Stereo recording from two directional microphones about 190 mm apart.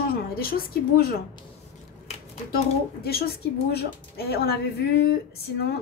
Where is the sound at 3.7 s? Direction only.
55° left (ahead or behind).